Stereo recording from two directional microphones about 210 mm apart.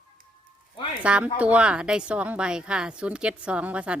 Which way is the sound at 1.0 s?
5° right (ahead or behind).